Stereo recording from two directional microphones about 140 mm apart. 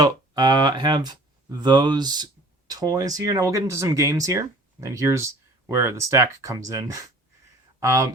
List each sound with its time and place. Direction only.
0.0 s speech: 30° right (ahead or behind)